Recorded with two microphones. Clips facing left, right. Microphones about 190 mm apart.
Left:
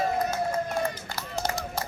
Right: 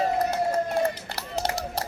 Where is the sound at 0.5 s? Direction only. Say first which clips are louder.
Right 4 dB; 35° right (ahead or behind).